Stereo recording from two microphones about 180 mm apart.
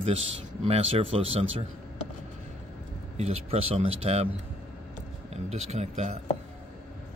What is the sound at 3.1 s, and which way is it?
Speech, 35° right (ahead or behind).